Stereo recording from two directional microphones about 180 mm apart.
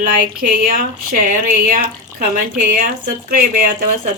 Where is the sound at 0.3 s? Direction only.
50° right (ahead or behind).